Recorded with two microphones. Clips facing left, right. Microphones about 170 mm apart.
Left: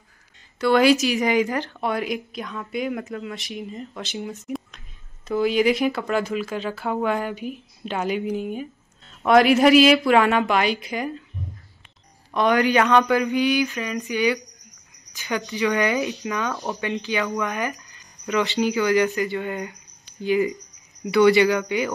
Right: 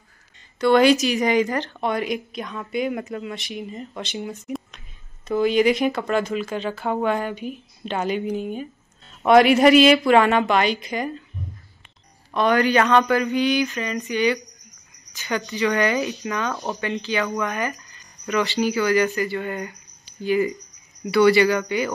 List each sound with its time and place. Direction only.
0.6 s speech: 5° left (ahead or behind)
12.4 s speech: 15° left (ahead or behind)